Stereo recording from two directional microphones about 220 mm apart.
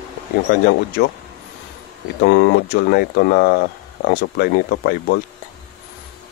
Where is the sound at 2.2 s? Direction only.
50° left (ahead or behind).